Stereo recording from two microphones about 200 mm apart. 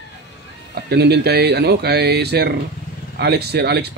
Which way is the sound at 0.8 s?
55° right (ahead or behind).